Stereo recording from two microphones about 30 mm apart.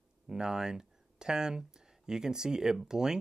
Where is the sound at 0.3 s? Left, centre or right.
Right.